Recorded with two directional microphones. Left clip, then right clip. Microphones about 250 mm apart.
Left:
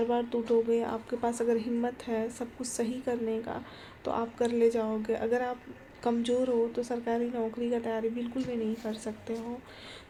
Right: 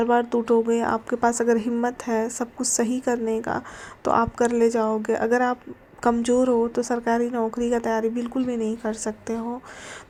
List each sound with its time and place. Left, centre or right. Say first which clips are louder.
0.0 s a woman's voice: right 9 dB; right